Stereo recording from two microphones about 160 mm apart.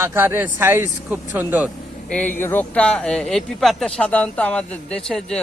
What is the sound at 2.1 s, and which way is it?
Speech, 10° left (ahead or behind).